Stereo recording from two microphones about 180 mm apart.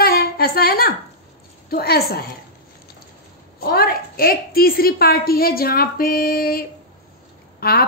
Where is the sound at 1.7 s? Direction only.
60° left (ahead or behind).